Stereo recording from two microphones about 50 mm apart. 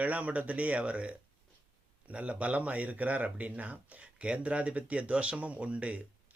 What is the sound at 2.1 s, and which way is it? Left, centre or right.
Speech, right.